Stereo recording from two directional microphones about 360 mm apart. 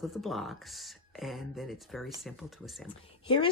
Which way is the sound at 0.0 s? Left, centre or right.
Centre.